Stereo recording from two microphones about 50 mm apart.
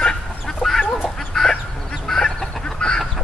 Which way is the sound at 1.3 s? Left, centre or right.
Centre.